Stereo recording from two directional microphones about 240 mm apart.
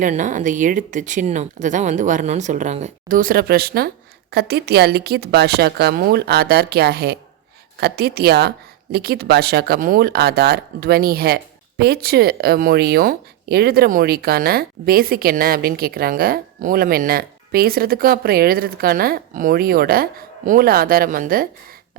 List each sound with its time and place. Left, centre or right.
0.0 s speech: right